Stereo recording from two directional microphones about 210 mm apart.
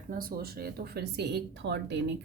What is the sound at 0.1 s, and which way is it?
A woman's voice, 45° right (ahead or behind).